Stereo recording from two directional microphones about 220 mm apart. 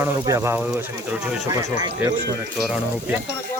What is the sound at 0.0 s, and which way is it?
Speech, 10° right (ahead or behind).